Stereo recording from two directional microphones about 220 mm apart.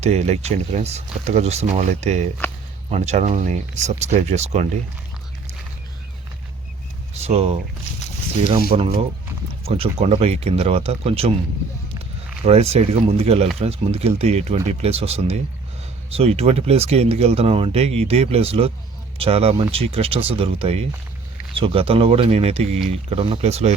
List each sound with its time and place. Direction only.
0.0 s speech: 30° right (ahead or behind)
7.1 s speech: 30° right (ahead or behind)
8.7 s speech: 30° right (ahead or behind)
12.5 s speech: 30° right (ahead or behind)